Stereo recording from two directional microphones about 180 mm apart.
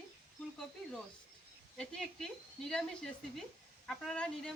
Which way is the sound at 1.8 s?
5° left (ahead or behind).